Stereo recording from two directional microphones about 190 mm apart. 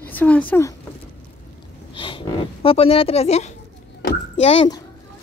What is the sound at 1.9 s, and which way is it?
Speech, 25° left (ahead or behind).